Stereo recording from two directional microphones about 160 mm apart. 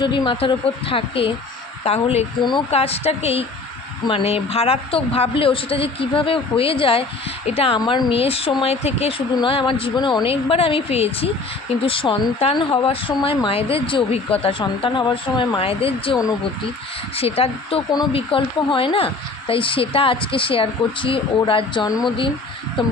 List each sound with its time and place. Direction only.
0.0 s speech: 30° left (ahead or behind)
2.4 s speech: 30° left (ahead or behind)
2.6 s speech: 40° left (ahead or behind)
17.2 s speech: 35° left (ahead or behind)